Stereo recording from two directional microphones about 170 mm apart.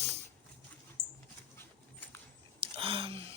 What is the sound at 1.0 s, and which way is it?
Dog, 75° right (ahead or behind).